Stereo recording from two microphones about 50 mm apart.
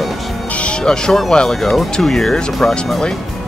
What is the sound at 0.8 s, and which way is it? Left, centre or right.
Speech, centre.